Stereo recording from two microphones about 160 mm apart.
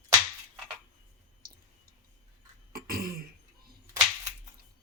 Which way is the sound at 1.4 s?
75° right (ahead or behind).